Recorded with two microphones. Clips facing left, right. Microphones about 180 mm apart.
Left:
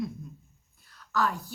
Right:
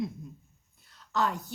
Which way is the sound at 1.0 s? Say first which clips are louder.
Left 1 dB; 20° right (ahead or behind).